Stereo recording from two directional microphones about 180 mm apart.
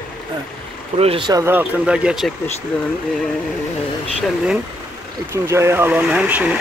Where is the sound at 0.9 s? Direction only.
30° right (ahead or behind).